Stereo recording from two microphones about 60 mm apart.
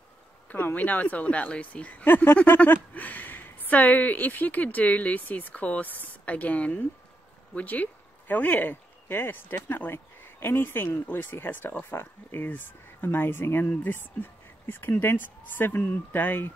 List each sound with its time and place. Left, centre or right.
0.5 s speech: left
2.0 s speech: left